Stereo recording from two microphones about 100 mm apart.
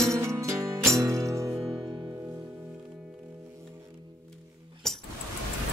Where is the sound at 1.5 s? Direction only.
Centre (ahead or behind).